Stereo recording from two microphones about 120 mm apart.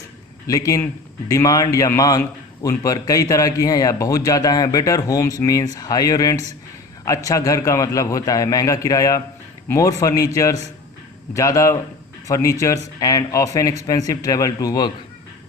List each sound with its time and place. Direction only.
0.4 s a man's voice: 30° left (ahead or behind)